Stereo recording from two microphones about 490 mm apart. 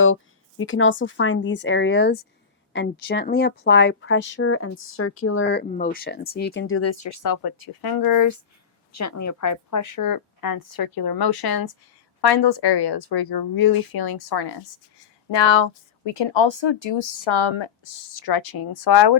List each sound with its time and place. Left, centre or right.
0.6 s a woman's voice: left
15.3 s speech: left